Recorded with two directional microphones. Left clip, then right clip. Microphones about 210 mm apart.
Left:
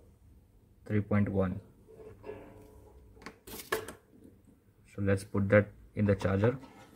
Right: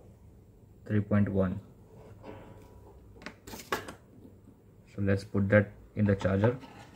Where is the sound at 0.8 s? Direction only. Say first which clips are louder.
Right 1 dB; 20° left (ahead or behind).